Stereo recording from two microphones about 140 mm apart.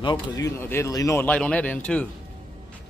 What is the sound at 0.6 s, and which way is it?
Speech, 15° left (ahead or behind).